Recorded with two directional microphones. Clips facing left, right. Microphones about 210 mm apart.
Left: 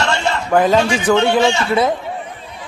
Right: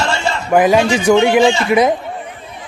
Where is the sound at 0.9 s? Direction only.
10° right (ahead or behind).